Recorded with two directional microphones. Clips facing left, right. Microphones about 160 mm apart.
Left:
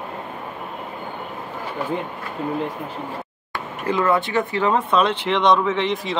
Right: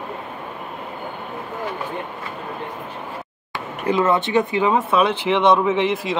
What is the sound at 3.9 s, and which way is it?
Speech, 20° right (ahead or behind).